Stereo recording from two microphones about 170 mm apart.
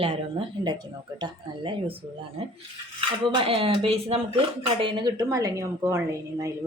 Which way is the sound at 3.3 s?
35° right (ahead or behind).